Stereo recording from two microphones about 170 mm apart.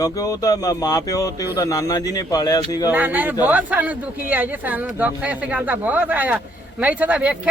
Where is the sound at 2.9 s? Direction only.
10° right (ahead or behind).